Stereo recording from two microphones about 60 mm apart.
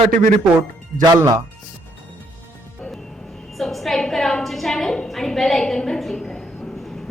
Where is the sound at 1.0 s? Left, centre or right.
Right.